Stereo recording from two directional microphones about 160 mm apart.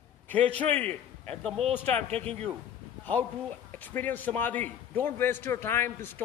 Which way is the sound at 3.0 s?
10° left (ahead or behind).